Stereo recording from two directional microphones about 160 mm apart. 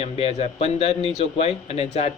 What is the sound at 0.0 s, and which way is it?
Speech, 40° left (ahead or behind).